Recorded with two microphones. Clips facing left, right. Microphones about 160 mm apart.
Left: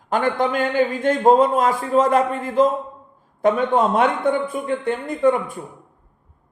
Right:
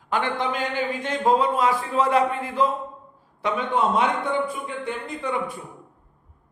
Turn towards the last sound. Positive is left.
turn(degrees=50)  # may be behind; listen again after turning